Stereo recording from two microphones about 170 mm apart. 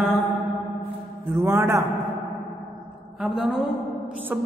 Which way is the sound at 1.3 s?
15° right (ahead or behind).